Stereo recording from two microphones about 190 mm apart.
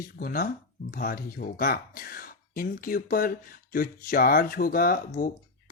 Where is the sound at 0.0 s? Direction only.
50° left (ahead or behind).